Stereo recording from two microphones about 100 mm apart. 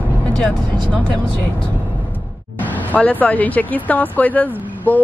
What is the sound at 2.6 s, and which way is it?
Speech, 15° left (ahead or behind).